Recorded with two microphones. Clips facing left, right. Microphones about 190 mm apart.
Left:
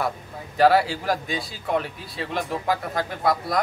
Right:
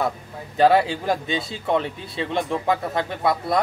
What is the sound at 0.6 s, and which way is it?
Speech, 20° right (ahead or behind).